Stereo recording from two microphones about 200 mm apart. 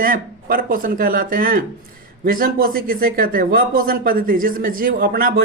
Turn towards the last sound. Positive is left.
turn(degrees=-45)  # may be behind; listen again after turning